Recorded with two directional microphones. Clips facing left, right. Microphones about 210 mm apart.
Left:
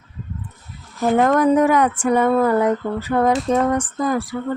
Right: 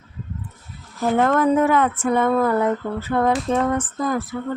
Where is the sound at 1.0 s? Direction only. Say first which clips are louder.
Left 2 dB; 15° left (ahead or behind).